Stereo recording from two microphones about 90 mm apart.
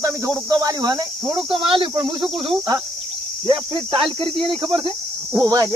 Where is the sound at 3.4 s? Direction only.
70° right (ahead or behind).